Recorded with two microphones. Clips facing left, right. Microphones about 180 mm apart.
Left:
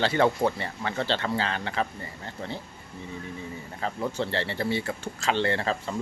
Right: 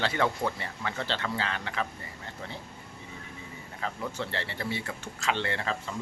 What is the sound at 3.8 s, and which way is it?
Speech, 30° left (ahead or behind).